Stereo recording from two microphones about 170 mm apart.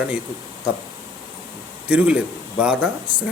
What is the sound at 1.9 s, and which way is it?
A man's voice, 5° right (ahead or behind).